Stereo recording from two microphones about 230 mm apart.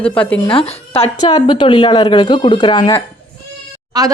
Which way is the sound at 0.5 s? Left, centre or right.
Left.